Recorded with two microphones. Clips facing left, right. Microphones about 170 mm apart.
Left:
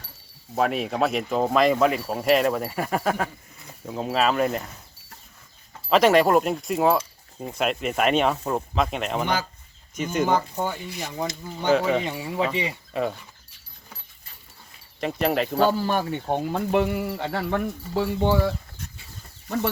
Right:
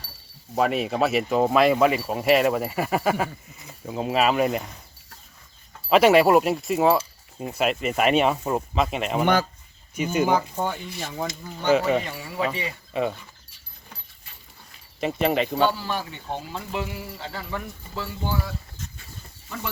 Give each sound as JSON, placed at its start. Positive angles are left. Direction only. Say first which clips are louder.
{"t": 0.5, "sound": "speech", "louder": "right 1 dB", "side_deg": 0}
{"t": 5.9, "sound": "speech", "louder": "right 1 dB", "side_deg": -5}
{"t": 9.2, "sound": "speech", "louder": "right 8 dB", "side_deg": -55}
{"t": 9.9, "sound": "speech", "louder": "right 1 dB", "side_deg": -10}
{"t": 12.0, "sound": "speech", "louder": "left 3 dB", "side_deg": 20}
{"t": 12.9, "sound": "speech", "louder": "right 2 dB", "side_deg": 0}
{"t": 15.0, "sound": "speech", "louder": "right 1 dB", "side_deg": 0}
{"t": 15.8, "sound": "speech", "louder": "left 6 dB", "side_deg": 50}